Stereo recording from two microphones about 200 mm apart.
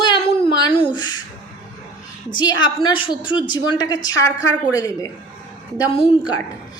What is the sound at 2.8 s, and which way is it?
A woman's voice, 25° left (ahead or behind).